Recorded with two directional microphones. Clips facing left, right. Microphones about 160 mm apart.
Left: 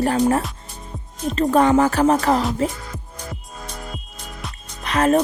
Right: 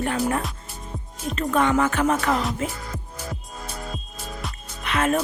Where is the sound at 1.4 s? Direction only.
35° left (ahead or behind).